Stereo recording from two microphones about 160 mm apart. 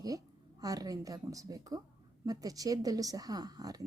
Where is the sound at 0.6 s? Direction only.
25° right (ahead or behind).